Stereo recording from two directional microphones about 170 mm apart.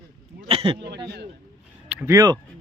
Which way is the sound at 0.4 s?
35° right (ahead or behind).